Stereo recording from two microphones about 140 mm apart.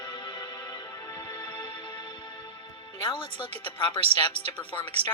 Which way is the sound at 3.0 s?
35° left (ahead or behind).